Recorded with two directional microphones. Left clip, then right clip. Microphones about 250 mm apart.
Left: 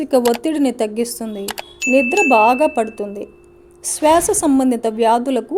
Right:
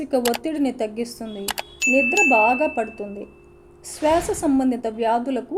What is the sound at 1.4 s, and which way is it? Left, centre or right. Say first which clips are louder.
Speech: right 3 dB; centre.